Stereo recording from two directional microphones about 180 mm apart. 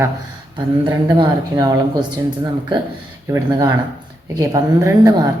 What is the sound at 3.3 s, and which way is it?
Speech, 20° right (ahead or behind).